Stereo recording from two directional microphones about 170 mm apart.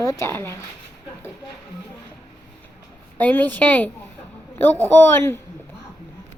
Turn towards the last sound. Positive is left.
turn(degrees=15)  # may be behind; listen again after turning